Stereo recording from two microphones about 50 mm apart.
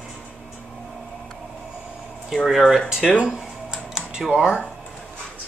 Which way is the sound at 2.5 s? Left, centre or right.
Centre.